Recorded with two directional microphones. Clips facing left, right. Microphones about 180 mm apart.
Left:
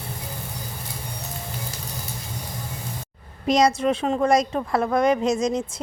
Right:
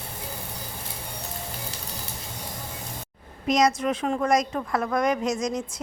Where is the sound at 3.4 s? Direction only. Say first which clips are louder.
Left 3 dB; 30° left (ahead or behind).